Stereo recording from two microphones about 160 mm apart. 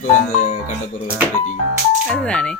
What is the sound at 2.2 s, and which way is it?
Speech, 5° left (ahead or behind).